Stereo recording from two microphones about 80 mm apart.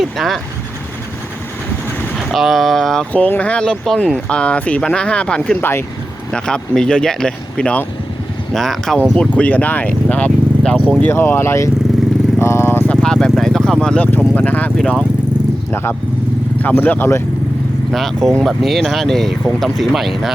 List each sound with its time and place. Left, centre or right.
0.0 s vehicle: centre
2.1 s speech: centre
3.1 s speech: centre
9.3 s speech: centre
11.0 s speech: left
12.4 s vehicle: left
12.9 s vehicle: centre
14.3 s speech: left
14.8 s speech: centre
15.7 s speech: left
17.9 s speech: centre